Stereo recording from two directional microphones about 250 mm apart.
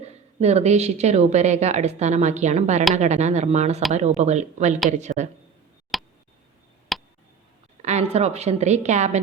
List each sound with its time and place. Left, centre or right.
0.0 s speech: right
5.9 s a sound: centre
7.8 s a woman's voice: right